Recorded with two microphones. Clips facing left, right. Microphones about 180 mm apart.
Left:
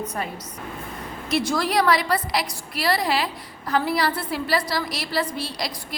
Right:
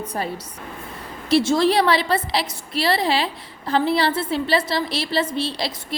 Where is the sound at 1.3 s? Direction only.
25° right (ahead or behind).